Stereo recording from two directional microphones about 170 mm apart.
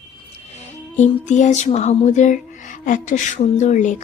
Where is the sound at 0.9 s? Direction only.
45° left (ahead or behind).